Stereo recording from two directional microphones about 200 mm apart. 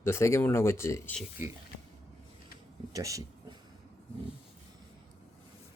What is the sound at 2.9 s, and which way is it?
Speech, 15° right (ahead or behind).